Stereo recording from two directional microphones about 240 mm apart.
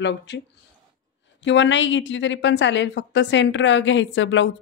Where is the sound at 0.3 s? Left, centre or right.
Left.